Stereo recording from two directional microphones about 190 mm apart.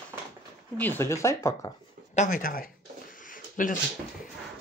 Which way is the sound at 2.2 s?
45° left (ahead or behind).